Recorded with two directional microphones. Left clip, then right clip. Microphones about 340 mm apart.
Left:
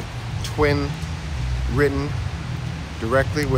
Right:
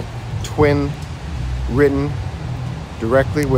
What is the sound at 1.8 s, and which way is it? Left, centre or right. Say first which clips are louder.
Speech: right 5 dB; centre.